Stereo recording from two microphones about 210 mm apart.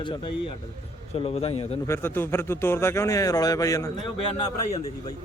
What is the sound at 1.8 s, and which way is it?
Speech, 10° left (ahead or behind).